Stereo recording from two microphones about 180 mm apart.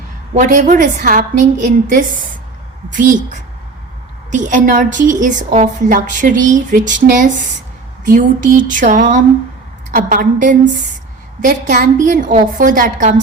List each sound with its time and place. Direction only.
0.3 s a woman's voice: 45° right (ahead or behind)